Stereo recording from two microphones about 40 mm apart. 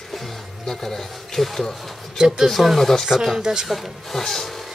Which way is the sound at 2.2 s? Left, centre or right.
Centre.